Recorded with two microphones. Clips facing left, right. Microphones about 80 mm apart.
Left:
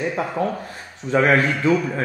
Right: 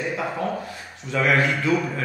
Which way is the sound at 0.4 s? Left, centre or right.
Left.